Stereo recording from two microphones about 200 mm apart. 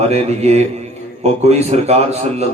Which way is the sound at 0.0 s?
30° right (ahead or behind).